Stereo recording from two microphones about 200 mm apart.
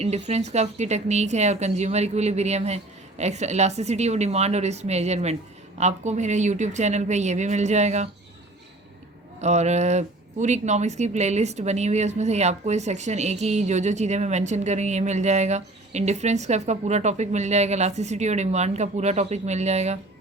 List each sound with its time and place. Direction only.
0.0 s speech: 30° right (ahead or behind)
9.4 s speech: 35° right (ahead or behind)